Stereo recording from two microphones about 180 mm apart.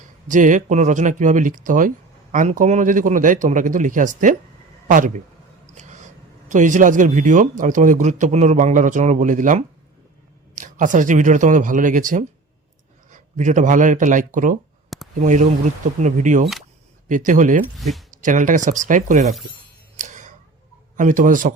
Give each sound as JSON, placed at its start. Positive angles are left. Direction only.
{"t": 0.3, "sound": "speech", "side_deg": -45}
{"t": 5.7, "sound": "a sound", "side_deg": -40}
{"t": 6.5, "sound": "speech", "side_deg": -45}
{"t": 17.7, "sound": "speech", "side_deg": 0}
{"t": 18.2, "sound": "speech", "side_deg": -45}
{"t": 20.0, "sound": "a sound", "side_deg": -45}
{"t": 20.9, "sound": "speech", "side_deg": -45}